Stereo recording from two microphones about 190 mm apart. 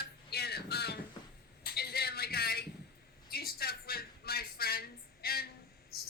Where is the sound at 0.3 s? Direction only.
55° left (ahead or behind).